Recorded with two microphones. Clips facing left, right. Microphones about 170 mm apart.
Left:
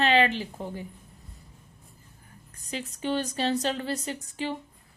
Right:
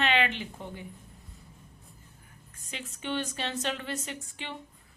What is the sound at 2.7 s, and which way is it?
A woman's voice, 35° left (ahead or behind).